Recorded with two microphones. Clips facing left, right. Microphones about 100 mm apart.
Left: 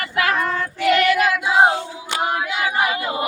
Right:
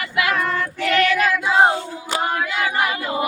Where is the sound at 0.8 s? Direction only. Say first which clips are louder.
Left 2 dB; 10° left (ahead or behind).